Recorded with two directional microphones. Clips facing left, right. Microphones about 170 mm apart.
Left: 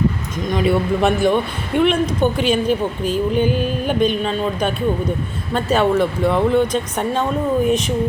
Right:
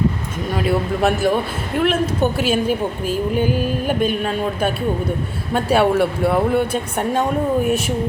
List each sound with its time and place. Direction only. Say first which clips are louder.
0.5 s a man's voice: left 3 dB; 5° right (ahead or behind)